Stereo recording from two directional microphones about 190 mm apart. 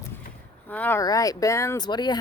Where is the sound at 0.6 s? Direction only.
10° left (ahead or behind).